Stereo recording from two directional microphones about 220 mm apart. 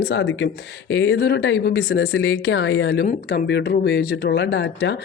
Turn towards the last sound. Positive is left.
turn(degrees=50)  # may be behind; listen again after turning